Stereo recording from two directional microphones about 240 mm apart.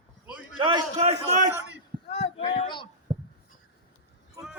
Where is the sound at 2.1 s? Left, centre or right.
Left.